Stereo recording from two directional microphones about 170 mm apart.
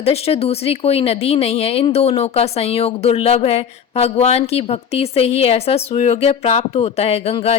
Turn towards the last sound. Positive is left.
turn(degrees=35)  # may be behind; listen again after turning